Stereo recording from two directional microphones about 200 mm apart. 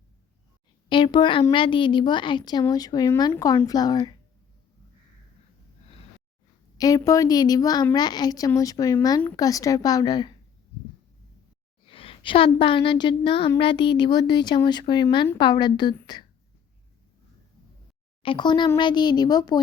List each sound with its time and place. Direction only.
0.9 s a woman's voice: 25° left (ahead or behind)
6.7 s a woman's voice: 20° left (ahead or behind)
11.9 s a woman's voice: 25° left (ahead or behind)
18.2 s a woman's voice: 25° left (ahead or behind)